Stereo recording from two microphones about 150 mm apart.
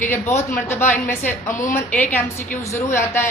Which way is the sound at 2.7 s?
15° left (ahead or behind).